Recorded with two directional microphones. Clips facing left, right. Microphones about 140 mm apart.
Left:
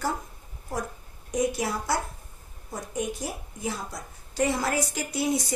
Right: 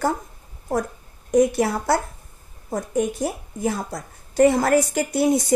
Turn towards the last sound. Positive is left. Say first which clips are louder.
# right 8 dB
turn(degrees=-50)  # may be behind; listen again after turning